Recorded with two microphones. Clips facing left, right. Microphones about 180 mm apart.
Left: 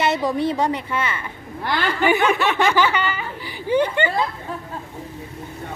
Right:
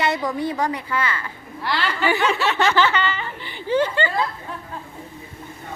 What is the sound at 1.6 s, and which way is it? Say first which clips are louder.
Speech: left 2 dB; 50° left (ahead or behind).